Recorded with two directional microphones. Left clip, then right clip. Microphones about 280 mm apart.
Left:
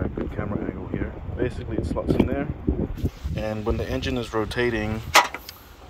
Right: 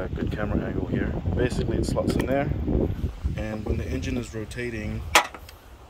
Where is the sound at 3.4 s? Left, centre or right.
Centre.